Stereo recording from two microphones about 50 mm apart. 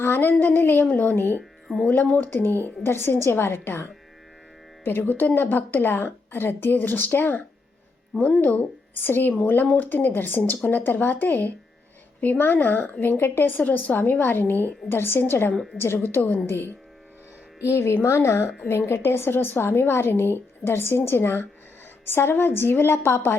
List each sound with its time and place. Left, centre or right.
0.0 s speech: left
1.6 s speech: centre
2.1 s speech: left
13.7 s speech: left
17.7 s speech: left